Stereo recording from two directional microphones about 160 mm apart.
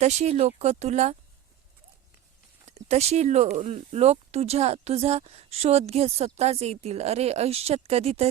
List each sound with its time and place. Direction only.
0.0 s speech: 45° right (ahead or behind)
2.6 s speech: 40° right (ahead or behind)